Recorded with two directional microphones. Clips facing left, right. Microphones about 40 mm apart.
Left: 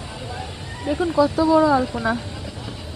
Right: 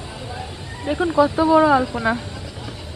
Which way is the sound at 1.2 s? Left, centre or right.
Right.